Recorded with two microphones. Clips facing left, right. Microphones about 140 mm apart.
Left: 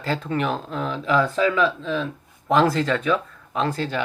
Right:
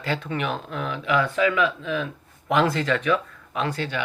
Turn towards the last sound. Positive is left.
turn(degrees=40)  # may be behind; listen again after turning